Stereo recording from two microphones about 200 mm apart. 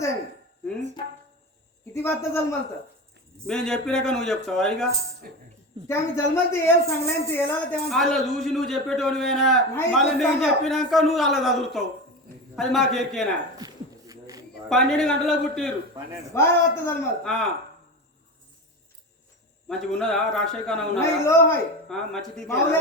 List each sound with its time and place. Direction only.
1.9 s a man's voice: 10° left (ahead or behind)
5.2 s speech: 50° right (ahead or behind)
5.9 s a man's voice: 15° left (ahead or behind)
13.6 s a sound: 20° right (ahead or behind)
14.7 s a man's voice: centre (ahead or behind)
19.6 s a man's voice: 5° left (ahead or behind)
21.2 s a man's voice: 15° left (ahead or behind)
21.8 s a man's voice: 5° left (ahead or behind)
22.4 s a man's voice: 15° left (ahead or behind)